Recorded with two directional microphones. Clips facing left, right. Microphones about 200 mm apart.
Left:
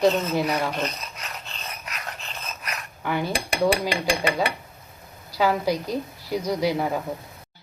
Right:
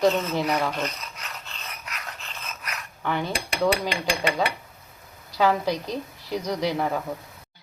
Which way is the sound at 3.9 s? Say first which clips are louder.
Left 2 dB; 35° left (ahead or behind).